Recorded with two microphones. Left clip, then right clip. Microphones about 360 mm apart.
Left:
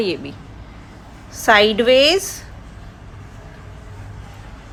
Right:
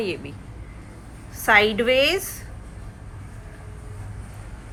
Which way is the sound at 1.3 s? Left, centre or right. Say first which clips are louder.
Left 4 dB; left.